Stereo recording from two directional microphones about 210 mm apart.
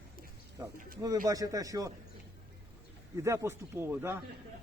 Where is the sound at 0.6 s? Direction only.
15° right (ahead or behind).